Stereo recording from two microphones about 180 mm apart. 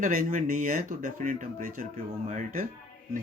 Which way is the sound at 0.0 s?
50° right (ahead or behind).